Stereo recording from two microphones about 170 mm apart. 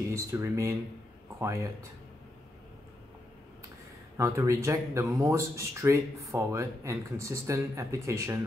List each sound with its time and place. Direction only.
0.1 s speech: 15° right (ahead or behind)
4.2 s speech: 20° right (ahead or behind)